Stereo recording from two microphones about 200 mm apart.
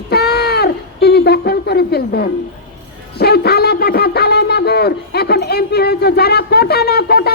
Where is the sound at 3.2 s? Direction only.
55° left (ahead or behind).